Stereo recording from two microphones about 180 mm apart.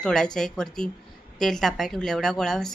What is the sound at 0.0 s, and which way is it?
A woman's voice, 5° left (ahead or behind).